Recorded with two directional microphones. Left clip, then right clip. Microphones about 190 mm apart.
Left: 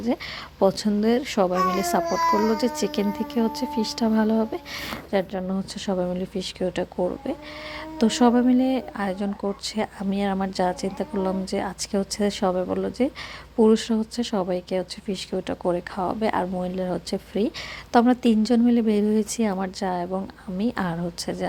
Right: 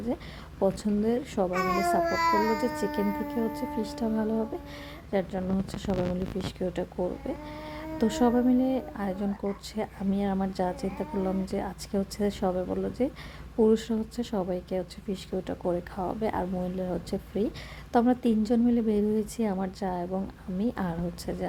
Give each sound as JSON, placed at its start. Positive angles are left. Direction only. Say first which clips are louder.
{"t": 0.8, "sound": "speech", "louder": "left 6 dB", "side_deg": 5}
{"t": 6.4, "sound": "speech", "louder": "left 5 dB", "side_deg": 10}
{"t": 7.9, "sound": "speech", "louder": "left 5 dB", "side_deg": 10}